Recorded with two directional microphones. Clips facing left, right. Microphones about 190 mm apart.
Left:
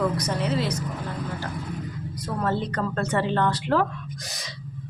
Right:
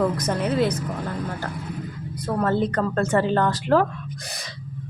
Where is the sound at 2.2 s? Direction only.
50° right (ahead or behind).